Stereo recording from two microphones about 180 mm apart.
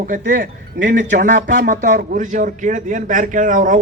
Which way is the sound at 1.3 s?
75° right (ahead or behind).